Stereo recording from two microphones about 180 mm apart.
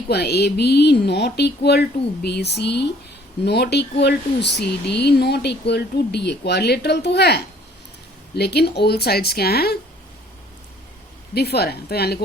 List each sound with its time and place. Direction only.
0.1 s speech: 65° left (ahead or behind)
11.3 s speech: 65° left (ahead or behind)